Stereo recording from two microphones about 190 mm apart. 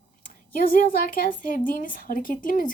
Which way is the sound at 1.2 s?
45° left (ahead or behind).